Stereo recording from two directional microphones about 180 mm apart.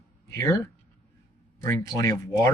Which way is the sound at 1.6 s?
20° left (ahead or behind).